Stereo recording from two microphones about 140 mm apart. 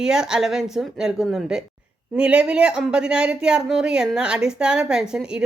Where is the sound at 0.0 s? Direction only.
5° right (ahead or behind).